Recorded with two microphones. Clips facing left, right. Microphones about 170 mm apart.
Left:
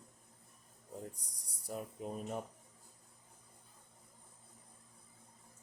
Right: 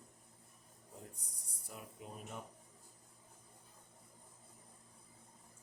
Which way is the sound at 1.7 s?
40° left (ahead or behind).